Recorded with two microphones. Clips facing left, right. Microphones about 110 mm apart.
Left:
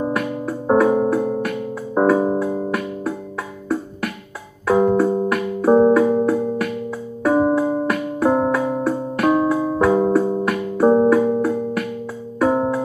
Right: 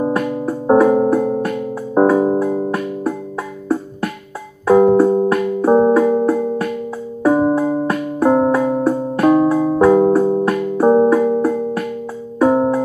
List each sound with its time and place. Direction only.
0.0 s keyboard: 25° right (ahead or behind)
2.0 s music: 20° right (ahead or behind)
4.7 s keyboard: 30° right (ahead or behind)
5.7 s keyboard: 15° right (ahead or behind)
7.2 s music: 10° right (ahead or behind)
7.5 s music: 25° right (ahead or behind)
8.7 s keyboard: 20° right (ahead or behind)
9.6 s music: 30° right (ahead or behind)